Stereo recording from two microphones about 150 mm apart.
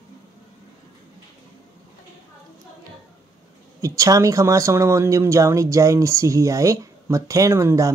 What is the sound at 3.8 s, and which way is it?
Speech, 20° right (ahead or behind).